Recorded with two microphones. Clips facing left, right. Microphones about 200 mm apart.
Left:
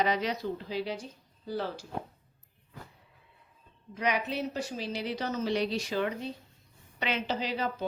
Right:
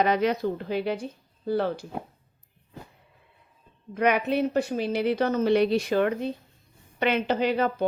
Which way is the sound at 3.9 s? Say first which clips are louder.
Right 8 dB; 55° right (ahead or behind).